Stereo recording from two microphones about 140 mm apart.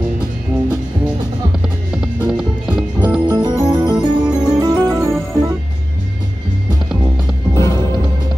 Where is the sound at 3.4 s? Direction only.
30° right (ahead or behind).